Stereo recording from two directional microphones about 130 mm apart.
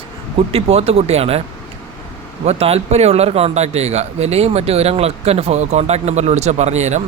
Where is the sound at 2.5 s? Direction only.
50° right (ahead or behind).